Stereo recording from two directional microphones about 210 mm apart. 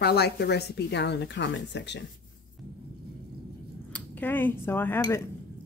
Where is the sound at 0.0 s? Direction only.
50° left (ahead or behind).